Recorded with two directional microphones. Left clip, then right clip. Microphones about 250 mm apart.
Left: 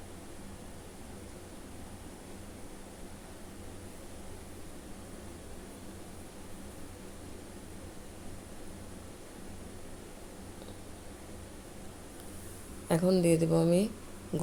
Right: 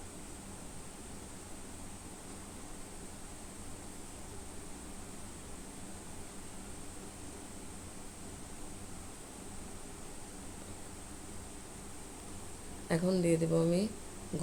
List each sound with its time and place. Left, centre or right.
12.9 s speech: centre